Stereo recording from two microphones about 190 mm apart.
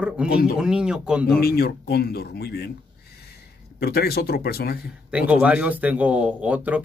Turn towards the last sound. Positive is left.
turn(degrees=-5)  # may be behind; listen again after turning